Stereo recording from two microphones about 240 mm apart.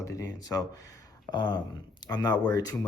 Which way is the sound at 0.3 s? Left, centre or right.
Centre.